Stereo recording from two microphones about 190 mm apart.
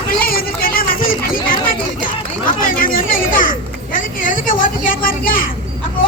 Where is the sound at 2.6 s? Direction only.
50° left (ahead or behind).